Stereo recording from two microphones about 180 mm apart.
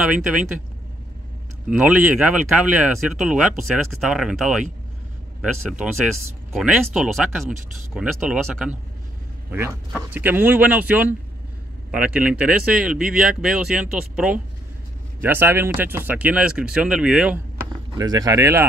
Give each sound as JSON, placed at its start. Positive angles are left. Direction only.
{"t": 0.0, "sound": "speech", "side_deg": -5}
{"t": 1.7, "sound": "speech", "side_deg": -5}
{"t": 10.1, "sound": "speech", "side_deg": -10}
{"t": 17.9, "sound": "speech", "side_deg": -20}